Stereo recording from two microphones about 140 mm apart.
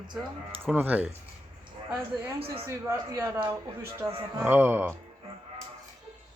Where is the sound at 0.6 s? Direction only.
15° right (ahead or behind).